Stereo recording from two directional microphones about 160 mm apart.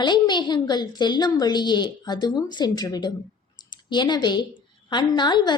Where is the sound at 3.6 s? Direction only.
30° left (ahead or behind).